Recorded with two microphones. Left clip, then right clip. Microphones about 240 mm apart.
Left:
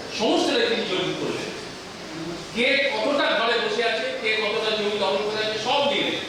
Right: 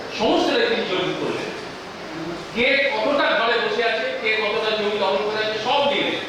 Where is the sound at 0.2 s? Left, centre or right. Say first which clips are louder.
Right 2 dB; centre.